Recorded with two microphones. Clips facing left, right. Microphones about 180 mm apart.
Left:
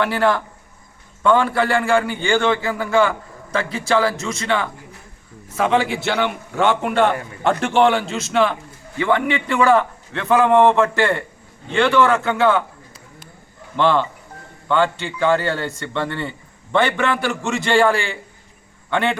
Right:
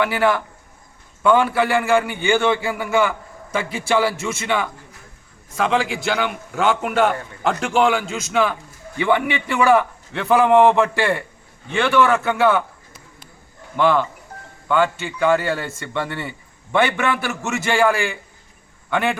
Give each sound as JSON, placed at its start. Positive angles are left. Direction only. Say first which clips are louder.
{"t": 0.0, "sound": "a man's voice", "louder": "even", "side_deg": -5}
{"t": 13.7, "sound": "a man's voice", "louder": "even", "side_deg": -5}